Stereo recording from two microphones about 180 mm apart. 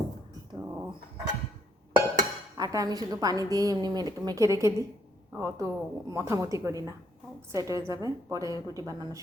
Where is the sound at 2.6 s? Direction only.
20° right (ahead or behind).